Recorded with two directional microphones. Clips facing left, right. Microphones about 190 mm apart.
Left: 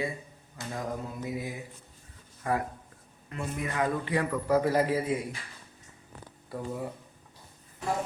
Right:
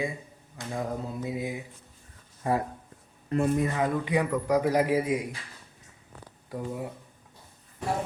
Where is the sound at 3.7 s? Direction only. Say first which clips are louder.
Right 2 dB; 15° right (ahead or behind).